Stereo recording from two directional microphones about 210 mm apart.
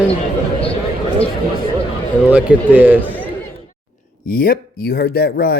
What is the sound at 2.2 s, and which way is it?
Speech, 5° right (ahead or behind).